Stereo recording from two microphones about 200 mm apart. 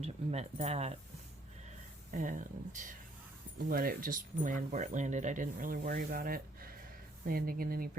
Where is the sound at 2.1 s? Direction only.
40° right (ahead or behind).